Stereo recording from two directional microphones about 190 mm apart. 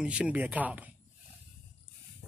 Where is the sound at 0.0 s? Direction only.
5° right (ahead or behind).